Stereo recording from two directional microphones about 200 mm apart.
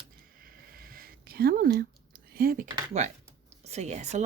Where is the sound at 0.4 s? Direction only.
45° right (ahead or behind).